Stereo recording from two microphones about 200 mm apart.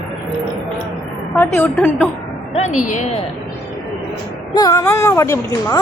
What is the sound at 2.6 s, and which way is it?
Speech, 35° left (ahead or behind).